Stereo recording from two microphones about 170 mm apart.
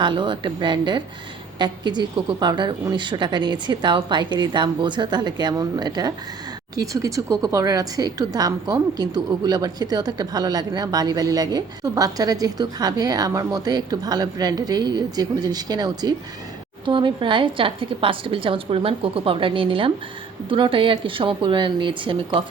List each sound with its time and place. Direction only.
0.0 s a woman's voice: 30° right (ahead or behind)